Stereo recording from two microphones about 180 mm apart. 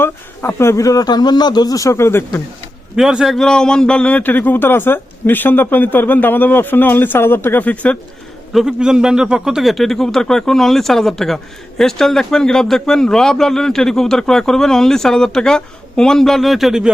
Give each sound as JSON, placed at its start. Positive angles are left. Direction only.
{"t": 0.0, "sound": "a man's voice", "side_deg": 15}
{"t": 2.9, "sound": "a man's voice", "side_deg": -5}
{"t": 8.5, "sound": "a man's voice", "side_deg": -5}